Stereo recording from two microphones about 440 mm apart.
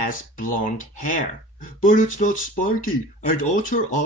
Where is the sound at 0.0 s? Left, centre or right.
Centre.